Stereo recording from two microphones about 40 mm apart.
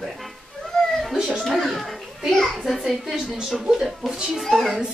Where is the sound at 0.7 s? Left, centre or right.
Centre.